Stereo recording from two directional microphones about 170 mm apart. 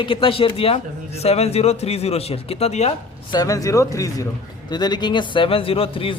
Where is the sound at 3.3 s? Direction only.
20° left (ahead or behind).